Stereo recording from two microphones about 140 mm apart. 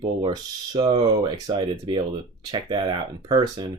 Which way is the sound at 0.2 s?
35° right (ahead or behind).